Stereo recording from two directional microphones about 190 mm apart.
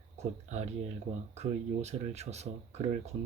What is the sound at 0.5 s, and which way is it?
Speech, 35° right (ahead or behind).